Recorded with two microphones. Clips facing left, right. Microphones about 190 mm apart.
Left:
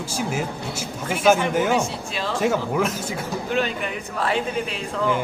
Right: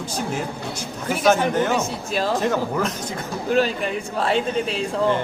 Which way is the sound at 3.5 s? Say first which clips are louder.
Right 6 dB; 35° right (ahead or behind).